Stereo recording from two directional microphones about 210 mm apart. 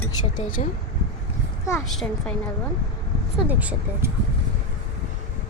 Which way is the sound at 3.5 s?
5° right (ahead or behind).